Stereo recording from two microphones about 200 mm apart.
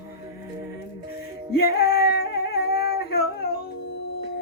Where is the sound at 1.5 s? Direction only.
50° left (ahead or behind).